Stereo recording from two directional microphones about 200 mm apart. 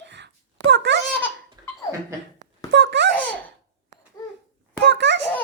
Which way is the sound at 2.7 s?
60° right (ahead or behind).